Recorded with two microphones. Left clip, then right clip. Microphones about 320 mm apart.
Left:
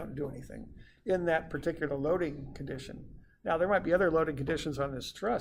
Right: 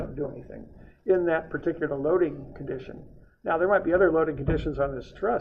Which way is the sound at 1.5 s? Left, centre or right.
Left.